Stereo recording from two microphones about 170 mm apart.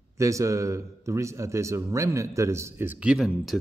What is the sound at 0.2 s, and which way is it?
A man's voice, 20° right (ahead or behind).